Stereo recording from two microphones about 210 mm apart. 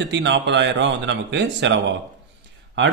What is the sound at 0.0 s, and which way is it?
Speech, 55° right (ahead or behind).